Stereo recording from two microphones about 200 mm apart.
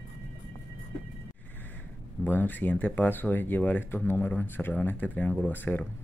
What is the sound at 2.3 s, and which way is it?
Speech, 10° left (ahead or behind).